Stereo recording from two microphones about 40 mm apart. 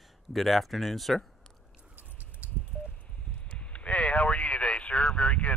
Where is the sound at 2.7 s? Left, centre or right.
Left.